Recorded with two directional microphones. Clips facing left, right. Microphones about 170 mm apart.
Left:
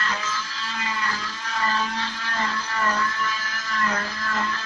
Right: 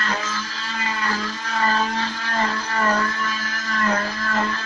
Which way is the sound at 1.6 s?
55° right (ahead or behind).